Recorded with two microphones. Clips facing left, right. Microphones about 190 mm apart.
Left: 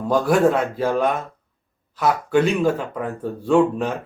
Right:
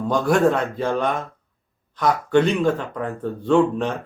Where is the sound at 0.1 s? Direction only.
5° left (ahead or behind).